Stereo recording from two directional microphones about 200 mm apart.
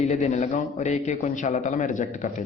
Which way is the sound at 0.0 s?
35° left (ahead or behind).